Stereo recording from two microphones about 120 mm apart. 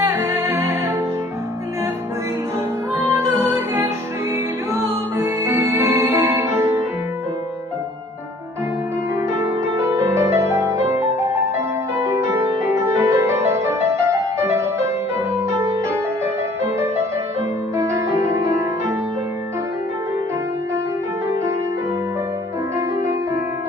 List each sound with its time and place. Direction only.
0.0 s music: 20° right (ahead or behind)
4.7 s music: 25° right (ahead or behind)
9.3 s music: 25° right (ahead or behind)
17.7 s music: 25° right (ahead or behind)